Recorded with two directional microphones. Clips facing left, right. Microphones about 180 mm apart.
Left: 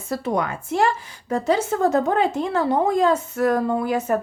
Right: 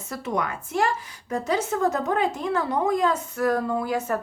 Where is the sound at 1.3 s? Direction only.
30° left (ahead or behind).